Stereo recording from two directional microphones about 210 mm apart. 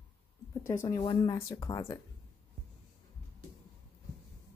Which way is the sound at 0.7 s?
15° left (ahead or behind).